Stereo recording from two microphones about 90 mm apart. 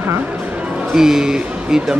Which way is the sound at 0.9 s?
5° right (ahead or behind).